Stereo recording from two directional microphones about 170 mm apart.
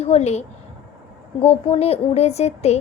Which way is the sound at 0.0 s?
40° left (ahead or behind).